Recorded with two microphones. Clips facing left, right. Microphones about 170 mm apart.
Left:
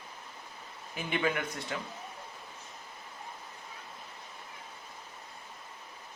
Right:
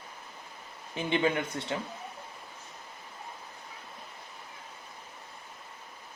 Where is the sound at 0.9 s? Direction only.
25° right (ahead or behind).